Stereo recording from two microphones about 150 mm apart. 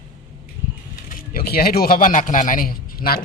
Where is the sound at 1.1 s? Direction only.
85° left.